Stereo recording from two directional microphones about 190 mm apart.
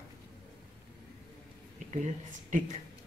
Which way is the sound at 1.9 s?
40° right (ahead or behind).